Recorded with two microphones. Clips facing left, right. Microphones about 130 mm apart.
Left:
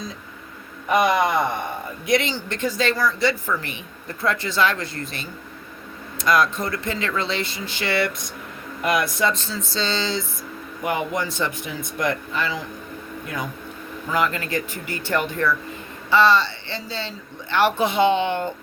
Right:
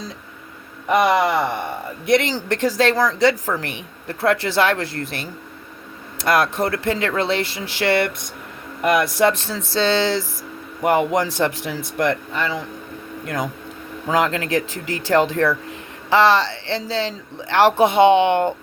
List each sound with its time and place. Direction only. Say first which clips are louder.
1.0 s speech: right 2 dB; 70° right (ahead or behind); by 3.5 s 90° right
4.2 s speech: right 4 dB; 70° right (ahead or behind)
11.9 s speech: right 3 dB; 60° right (ahead or behind)
13.2 s speech: right 6 dB; 85° right
17.8 s speech: right 6 dB; 60° right (ahead or behind)